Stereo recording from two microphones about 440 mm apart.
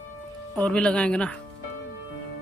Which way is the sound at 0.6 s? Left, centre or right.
Centre.